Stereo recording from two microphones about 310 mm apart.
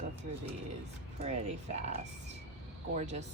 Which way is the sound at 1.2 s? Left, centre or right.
Right.